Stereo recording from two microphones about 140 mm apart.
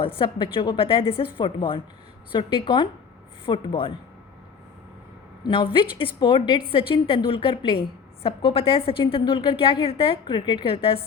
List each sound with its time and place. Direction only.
0.0 s a woman's voice: 40° left (ahead or behind)
5.4 s a woman's voice: 35° left (ahead or behind)